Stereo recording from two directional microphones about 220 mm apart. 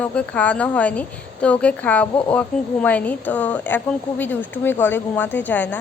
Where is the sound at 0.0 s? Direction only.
5° left (ahead or behind).